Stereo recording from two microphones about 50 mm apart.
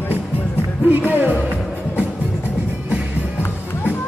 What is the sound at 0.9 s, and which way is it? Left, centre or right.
Speech, right.